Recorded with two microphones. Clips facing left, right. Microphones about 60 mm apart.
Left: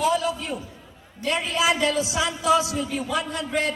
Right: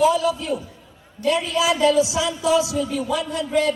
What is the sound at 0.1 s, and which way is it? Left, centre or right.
Speech, left.